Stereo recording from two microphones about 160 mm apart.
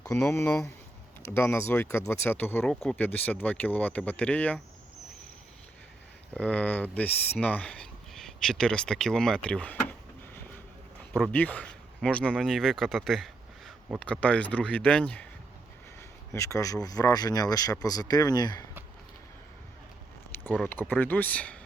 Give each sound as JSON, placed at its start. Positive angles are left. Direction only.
{"t": 0.0, "sound": "speech", "side_deg": 15}
{"t": 6.3, "sound": "speech", "side_deg": 5}
{"t": 11.1, "sound": "speech", "side_deg": 10}
{"t": 16.0, "sound": "speech", "side_deg": 20}
{"t": 20.7, "sound": "speech", "side_deg": 10}